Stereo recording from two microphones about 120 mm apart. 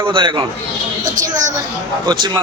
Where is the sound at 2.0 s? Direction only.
40° right (ahead or behind).